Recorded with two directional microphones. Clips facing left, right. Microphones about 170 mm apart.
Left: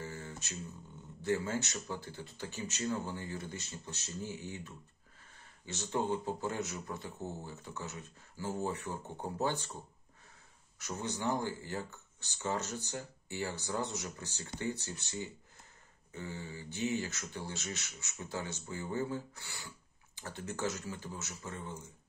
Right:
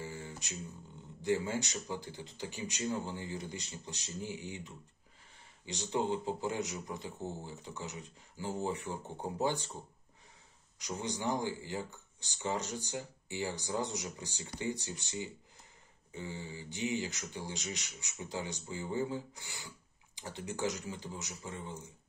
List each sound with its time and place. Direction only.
0.0 s a sound: 15° right (ahead or behind)
1.2 s a man's voice: 15° right (ahead or behind)
10.8 s a man's voice: 15° right (ahead or behind)